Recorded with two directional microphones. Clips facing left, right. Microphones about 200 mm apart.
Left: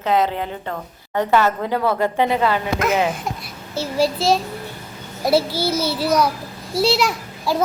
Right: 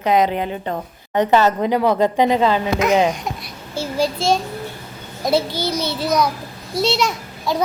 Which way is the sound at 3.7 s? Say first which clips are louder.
Left 1 dB; centre (ahead or behind).